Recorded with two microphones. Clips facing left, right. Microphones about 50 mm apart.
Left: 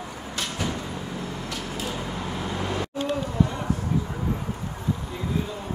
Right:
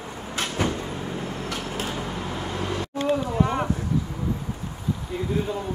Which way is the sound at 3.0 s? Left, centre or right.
Right.